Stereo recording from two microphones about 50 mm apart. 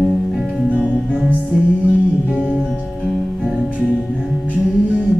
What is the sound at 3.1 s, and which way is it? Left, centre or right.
Music, centre.